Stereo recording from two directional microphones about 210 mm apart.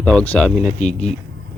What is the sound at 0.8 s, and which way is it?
Speech, 30° left (ahead or behind).